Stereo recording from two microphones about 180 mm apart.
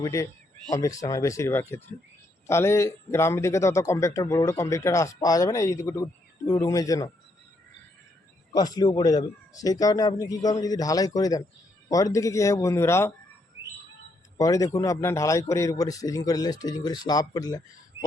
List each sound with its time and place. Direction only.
0.0 s a man's voice: 20° left (ahead or behind)
8.5 s a man's voice: 20° left (ahead or behind)
14.3 s a man's voice: 20° left (ahead or behind)